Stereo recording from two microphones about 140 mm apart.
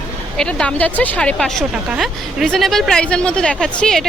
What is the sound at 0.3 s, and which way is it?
A woman's voice, 5° left (ahead or behind).